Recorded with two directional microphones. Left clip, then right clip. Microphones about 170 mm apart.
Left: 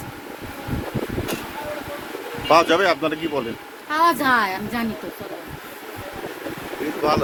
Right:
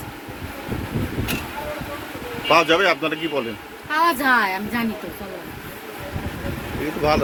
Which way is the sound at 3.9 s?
75° left (ahead or behind).